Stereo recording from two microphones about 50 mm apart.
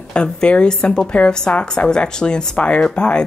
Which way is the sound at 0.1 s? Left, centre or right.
Centre.